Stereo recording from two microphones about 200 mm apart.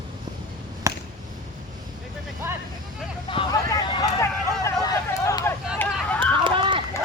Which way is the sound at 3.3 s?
20° left (ahead or behind).